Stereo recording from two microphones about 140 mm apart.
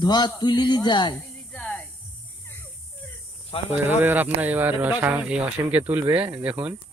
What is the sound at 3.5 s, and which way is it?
Speech, 45° left (ahead or behind).